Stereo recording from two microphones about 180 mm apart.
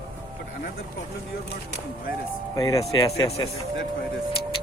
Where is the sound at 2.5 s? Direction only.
20° left (ahead or behind).